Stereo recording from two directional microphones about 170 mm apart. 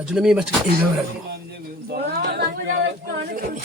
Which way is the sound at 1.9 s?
70° right (ahead or behind).